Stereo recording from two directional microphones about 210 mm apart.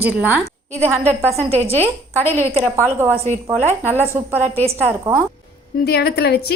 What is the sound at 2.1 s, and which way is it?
Speech, 10° left (ahead or behind).